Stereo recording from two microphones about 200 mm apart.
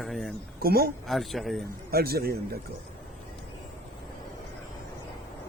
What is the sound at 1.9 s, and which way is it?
Speech, 50° right (ahead or behind).